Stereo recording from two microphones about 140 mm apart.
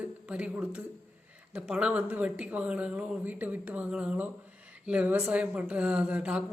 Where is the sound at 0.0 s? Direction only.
10° right (ahead or behind).